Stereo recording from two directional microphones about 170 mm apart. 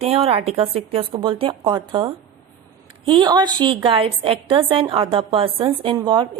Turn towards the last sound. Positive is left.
turn(degrees=-30)  # may be behind; listen again after turning